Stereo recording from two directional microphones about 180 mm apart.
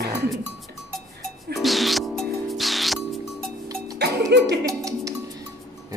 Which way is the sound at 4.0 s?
65° right (ahead or behind).